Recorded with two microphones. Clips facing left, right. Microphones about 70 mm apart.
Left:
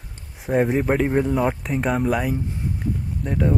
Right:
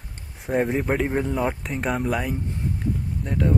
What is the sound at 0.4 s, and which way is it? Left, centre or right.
Speech, centre.